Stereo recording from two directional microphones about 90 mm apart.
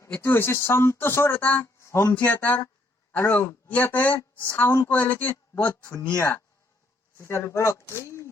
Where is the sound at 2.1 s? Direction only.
20° left (ahead or behind).